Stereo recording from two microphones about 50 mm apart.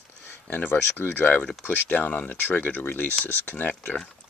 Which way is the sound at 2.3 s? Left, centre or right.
Left.